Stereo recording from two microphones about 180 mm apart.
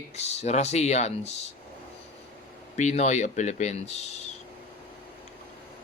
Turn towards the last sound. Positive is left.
turn(degrees=35)  # may be behind; listen again after turning